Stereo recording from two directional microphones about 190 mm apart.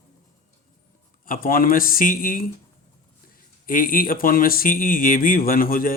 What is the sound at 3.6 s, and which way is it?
Speech, 45° left (ahead or behind).